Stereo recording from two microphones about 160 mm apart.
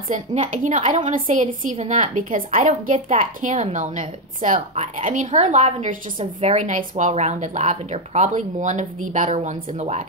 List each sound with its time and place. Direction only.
0.1 s a woman's voice: 45° right (ahead or behind)